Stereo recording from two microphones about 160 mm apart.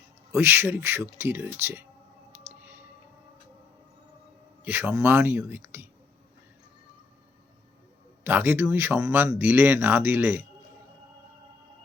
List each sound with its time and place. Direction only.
0.3 s speech: 15° right (ahead or behind)
4.6 s speech: 15° right (ahead or behind)
8.2 s speech: 10° right (ahead or behind)